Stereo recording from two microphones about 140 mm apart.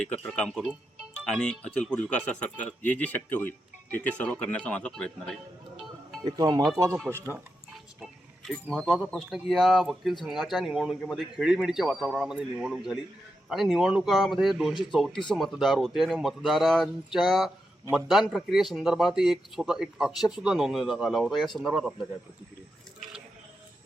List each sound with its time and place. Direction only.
0.0 s speech: 10° left (ahead or behind)
6.2 s speech: 25° right (ahead or behind)
8.7 s a man's voice: 5° right (ahead or behind)